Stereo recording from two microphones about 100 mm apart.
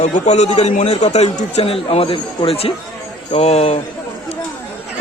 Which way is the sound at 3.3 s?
90° left.